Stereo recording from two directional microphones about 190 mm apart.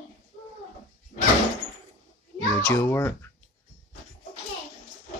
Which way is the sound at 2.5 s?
10° left (ahead or behind).